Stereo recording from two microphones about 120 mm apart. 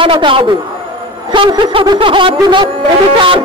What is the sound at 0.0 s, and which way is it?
A man's voice, 45° right (ahead or behind).